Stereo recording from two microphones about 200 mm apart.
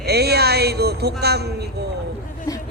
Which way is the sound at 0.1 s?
55° right (ahead or behind).